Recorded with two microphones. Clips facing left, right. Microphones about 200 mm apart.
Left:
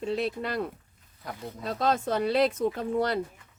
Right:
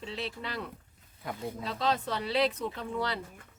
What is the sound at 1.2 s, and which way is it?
Speech, centre (ahead or behind).